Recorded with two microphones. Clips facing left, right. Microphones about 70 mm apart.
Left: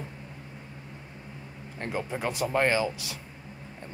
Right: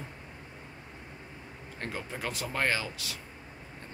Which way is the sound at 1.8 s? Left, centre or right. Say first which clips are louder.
Left 6 dB; left.